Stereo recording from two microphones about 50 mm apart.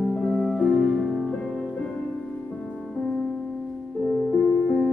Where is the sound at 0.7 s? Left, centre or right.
Centre.